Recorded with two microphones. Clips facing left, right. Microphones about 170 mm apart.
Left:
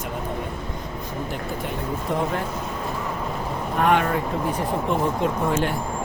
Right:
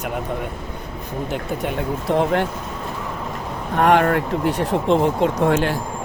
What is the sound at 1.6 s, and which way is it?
Speech, 90° right.